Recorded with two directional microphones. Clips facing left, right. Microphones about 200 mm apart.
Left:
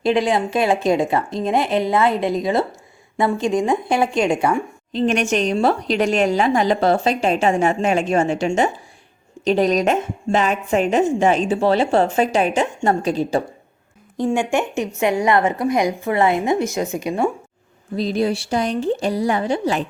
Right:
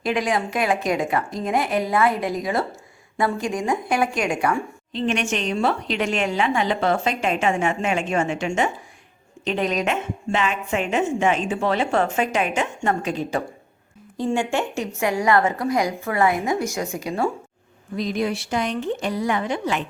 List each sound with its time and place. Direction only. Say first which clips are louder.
0.0 s a woman's voice: left 5 dB; 25° left (ahead or behind)
4.9 s a woman's voice: left 5 dB; 40° left (ahead or behind)
14.2 s a woman's voice: left 3 dB; 15° left (ahead or behind)
17.9 s a woman's voice: left 4 dB; 35° left (ahead or behind)